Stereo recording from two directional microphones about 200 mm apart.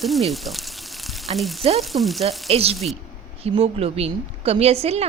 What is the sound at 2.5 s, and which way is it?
A woman's voice, 30° right (ahead or behind).